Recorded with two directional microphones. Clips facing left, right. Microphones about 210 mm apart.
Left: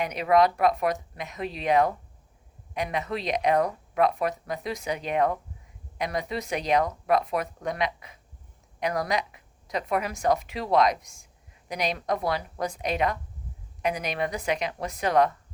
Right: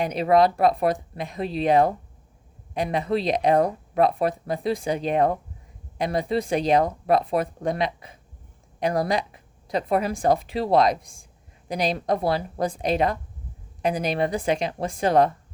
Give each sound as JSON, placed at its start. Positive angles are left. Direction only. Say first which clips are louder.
{"t": 0.0, "sound": "speech", "louder": "right 3 dB", "side_deg": -30}